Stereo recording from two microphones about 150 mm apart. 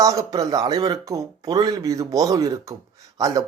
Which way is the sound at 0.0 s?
20° right (ahead or behind).